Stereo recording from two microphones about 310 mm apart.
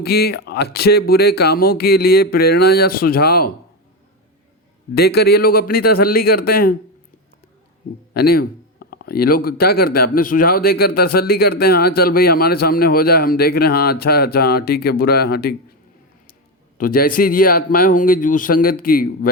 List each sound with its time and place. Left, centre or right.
0.0 s speech: left
4.9 s speech: left
8.1 s speech: left
16.7 s speech: left